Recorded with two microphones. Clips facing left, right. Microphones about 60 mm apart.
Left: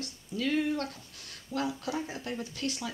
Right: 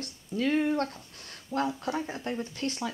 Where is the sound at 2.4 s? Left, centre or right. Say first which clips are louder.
Right 2 dB; right.